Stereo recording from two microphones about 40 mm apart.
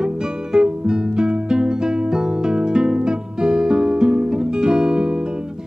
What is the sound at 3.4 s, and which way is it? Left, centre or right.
Guitar, centre.